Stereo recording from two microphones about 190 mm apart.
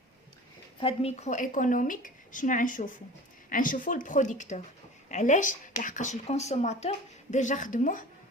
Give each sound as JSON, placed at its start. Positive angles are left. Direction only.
{"t": 0.8, "sound": "a woman's voice", "side_deg": 30}